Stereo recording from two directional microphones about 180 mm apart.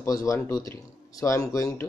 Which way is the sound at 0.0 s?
20° left (ahead or behind).